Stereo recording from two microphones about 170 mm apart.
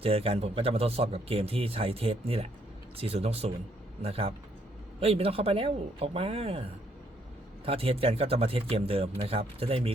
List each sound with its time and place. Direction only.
0.0 s a man's voice: 35° right (ahead or behind)